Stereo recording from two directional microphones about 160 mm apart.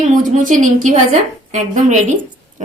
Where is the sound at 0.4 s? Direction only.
55° right (ahead or behind).